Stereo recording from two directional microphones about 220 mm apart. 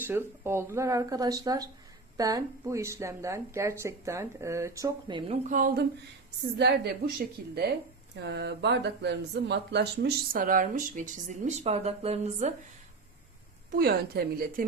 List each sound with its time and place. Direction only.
0.0 s speech: 10° right (ahead or behind)
5.5 s speech: 40° right (ahead or behind)
6.4 s a woman's voice: 50° right (ahead or behind); by 12.5 s 30° right (ahead or behind)
13.7 s a woman's voice: 45° right (ahead or behind)